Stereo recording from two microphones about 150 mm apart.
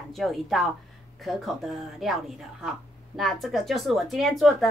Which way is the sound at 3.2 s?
Centre (ahead or behind).